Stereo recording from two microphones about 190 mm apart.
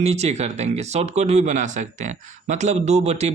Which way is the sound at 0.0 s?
35° right (ahead or behind).